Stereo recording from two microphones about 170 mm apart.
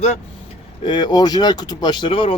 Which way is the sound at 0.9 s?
25° left (ahead or behind).